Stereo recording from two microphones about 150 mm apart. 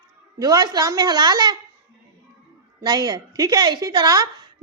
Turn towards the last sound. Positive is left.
turn(degrees=-25)  # may be behind; listen again after turning